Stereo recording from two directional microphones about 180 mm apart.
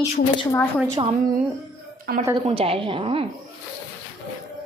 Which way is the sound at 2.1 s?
55° right (ahead or behind).